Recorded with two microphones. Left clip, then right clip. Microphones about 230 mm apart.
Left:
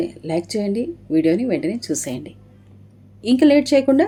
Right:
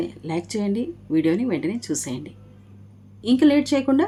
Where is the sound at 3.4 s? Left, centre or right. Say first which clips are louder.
Left 4 dB; right.